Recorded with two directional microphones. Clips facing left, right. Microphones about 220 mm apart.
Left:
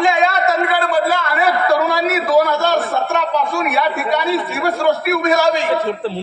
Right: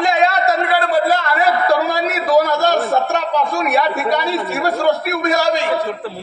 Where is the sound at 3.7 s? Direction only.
40° right (ahead or behind).